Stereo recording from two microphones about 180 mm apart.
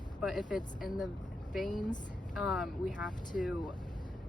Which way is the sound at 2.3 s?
5° right (ahead or behind).